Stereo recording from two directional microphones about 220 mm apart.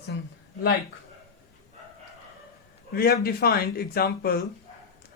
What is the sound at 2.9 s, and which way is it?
Speech, 45° left (ahead or behind).